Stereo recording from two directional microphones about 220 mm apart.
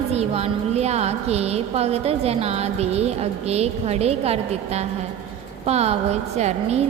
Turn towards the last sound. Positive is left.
turn(degrees=-30)  # may be behind; listen again after turning